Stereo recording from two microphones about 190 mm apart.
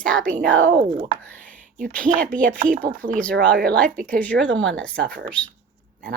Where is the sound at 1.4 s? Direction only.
45° right (ahead or behind).